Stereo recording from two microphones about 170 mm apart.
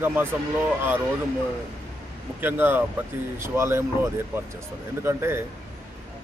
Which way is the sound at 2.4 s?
10° right (ahead or behind).